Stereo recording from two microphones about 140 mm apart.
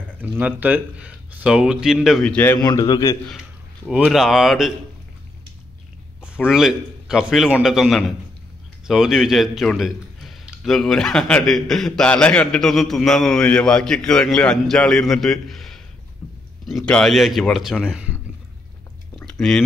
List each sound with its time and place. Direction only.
0.2 s a man's voice: 10° right (ahead or behind)
2.5 s a man's voice: 25° left (ahead or behind)
3.3 s a man's voice: centre (ahead or behind)
6.2 s a man's voice: 5° right (ahead or behind)
19.1 s a sound: 5° left (ahead or behind)